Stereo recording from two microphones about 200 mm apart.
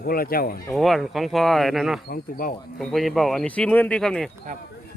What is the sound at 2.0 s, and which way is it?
Speech, 45° left (ahead or behind).